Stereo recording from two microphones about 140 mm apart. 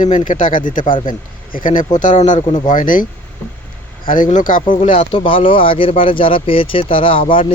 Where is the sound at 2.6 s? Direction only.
75° left (ahead or behind).